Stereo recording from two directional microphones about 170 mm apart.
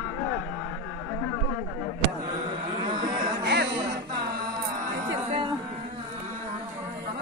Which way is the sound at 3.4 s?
90° right.